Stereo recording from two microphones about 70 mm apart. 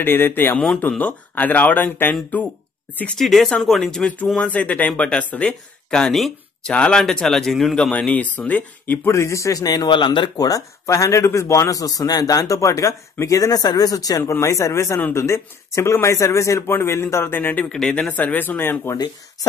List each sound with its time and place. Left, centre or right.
0.0 s speech: left
3.2 s speech: centre
4.4 s speech: left; by 7.7 s centre
7.7 s speech: centre
9.1 s speech: left
14.2 s speech: left
17.6 s speech: centre
17.9 s speech: left